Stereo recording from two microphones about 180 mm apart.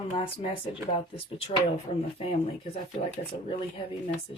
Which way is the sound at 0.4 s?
30° left (ahead or behind).